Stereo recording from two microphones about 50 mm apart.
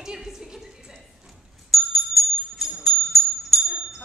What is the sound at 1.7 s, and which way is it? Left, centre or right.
Bicycle bell, centre.